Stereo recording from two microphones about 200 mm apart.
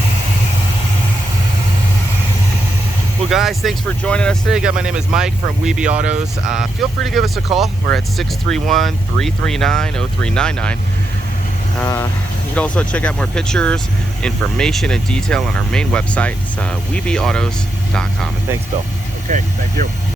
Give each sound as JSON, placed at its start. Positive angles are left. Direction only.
{"t": 3.2, "sound": "speech", "side_deg": 0}
{"t": 5.8, "sound": "speech", "side_deg": -35}
{"t": 6.5, "sound": "speech", "side_deg": 0}
{"t": 12.5, "sound": "speech", "side_deg": 5}
{"t": 19.3, "sound": "speech", "side_deg": -40}